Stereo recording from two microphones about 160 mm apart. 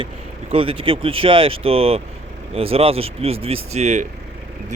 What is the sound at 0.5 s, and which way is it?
Speech, 35° right (ahead or behind).